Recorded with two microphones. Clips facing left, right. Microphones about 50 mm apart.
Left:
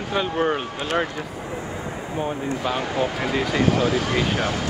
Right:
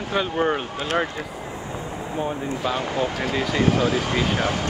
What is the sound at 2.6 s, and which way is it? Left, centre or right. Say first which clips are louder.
Speech: even; centre.